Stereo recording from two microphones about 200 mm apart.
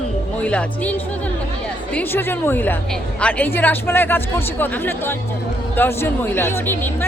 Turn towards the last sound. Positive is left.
turn(degrees=10)  # may be behind; listen again after turning